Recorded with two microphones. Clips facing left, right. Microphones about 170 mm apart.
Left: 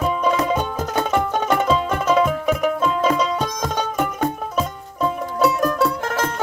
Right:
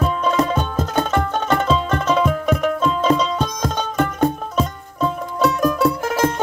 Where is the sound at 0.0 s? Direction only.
10° left (ahead or behind).